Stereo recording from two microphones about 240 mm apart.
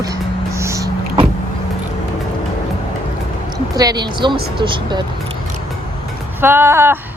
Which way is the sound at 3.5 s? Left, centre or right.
Centre.